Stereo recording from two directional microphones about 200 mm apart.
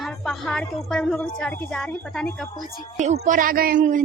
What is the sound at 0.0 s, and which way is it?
A woman's voice, centre (ahead or behind).